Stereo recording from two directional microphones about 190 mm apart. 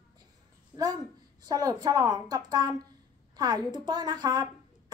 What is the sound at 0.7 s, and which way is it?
A woman's voice, 20° right (ahead or behind).